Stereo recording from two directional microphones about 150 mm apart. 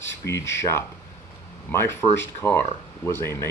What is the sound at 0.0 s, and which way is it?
Speech, 20° left (ahead or behind).